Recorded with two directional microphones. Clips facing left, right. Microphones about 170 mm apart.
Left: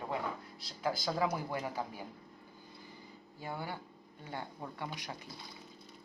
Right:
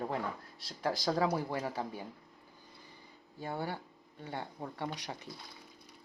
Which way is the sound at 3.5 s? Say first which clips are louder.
Right 4 dB; 35° right (ahead or behind).